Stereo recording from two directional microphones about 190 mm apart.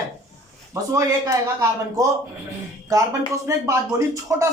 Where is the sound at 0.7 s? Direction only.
15° right (ahead or behind).